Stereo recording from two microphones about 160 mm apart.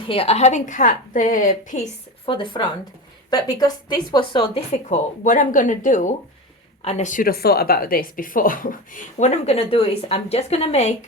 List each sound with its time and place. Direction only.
0.1 s a woman's voice: 40° left (ahead or behind)
2.2 s speech: 30° left (ahead or behind)
4.7 s a woman's voice: 50° left (ahead or behind)